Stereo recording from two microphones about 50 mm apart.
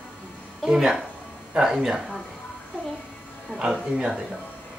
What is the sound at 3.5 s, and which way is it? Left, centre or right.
Speech, left.